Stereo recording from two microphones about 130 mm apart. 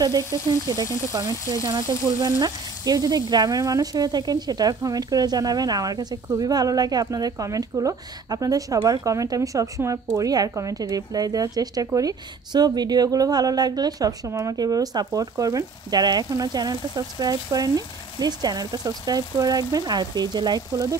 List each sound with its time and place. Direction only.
0.2 s frying: 25° left (ahead or behind)
2.0 s speech: 30° right (ahead or behind)